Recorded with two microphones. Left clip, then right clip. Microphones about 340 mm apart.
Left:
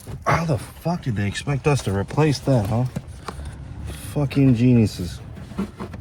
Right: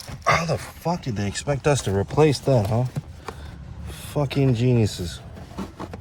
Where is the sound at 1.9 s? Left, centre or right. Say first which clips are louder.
Right 3 dB; right.